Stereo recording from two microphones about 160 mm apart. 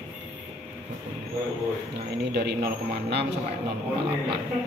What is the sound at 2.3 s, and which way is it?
Speech, 90° right.